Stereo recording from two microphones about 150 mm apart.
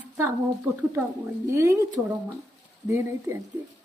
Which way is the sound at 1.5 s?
20° right (ahead or behind).